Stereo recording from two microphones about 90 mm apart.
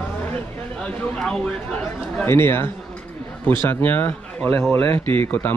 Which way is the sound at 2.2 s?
30° left (ahead or behind).